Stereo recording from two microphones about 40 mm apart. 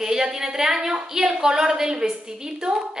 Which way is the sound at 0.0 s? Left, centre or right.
Centre.